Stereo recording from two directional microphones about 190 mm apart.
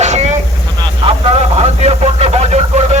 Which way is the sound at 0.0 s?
35° right (ahead or behind).